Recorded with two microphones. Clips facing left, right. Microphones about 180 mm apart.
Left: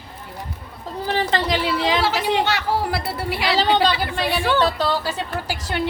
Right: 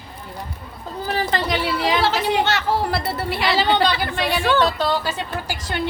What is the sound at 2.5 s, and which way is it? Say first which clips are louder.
Speech: right 1 dB; 10° left (ahead or behind).